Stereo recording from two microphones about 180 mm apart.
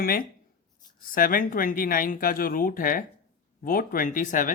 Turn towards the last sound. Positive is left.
turn(degrees=50)  # may be behind; listen again after turning